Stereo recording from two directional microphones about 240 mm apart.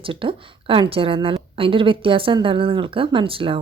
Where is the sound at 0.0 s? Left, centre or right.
Right.